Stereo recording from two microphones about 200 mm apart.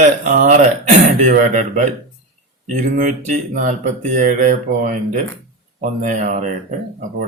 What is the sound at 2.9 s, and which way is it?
Speech, 40° right (ahead or behind).